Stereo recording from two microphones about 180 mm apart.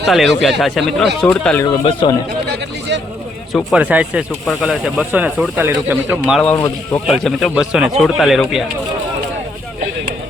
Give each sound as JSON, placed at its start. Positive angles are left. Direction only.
{"t": 0.1, "sound": "speech", "side_deg": 0}
{"t": 1.8, "sound": "a man's voice", "side_deg": 30}
{"t": 3.5, "sound": "speech", "side_deg": -5}
{"t": 6.4, "sound": "speech", "side_deg": 10}
{"t": 7.1, "sound": "speech", "side_deg": 0}